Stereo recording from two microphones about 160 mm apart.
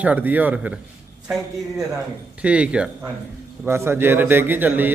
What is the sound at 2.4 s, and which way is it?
A man's voice, 10° right (ahead or behind).